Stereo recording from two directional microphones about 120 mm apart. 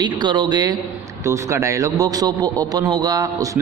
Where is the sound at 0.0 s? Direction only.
40° right (ahead or behind).